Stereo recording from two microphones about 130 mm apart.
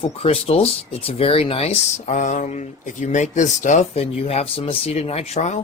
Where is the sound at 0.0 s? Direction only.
50° left (ahead or behind); by 3.8 s 70° left (ahead or behind).